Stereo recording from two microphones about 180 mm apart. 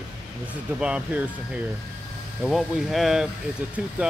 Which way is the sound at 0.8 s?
5° right (ahead or behind).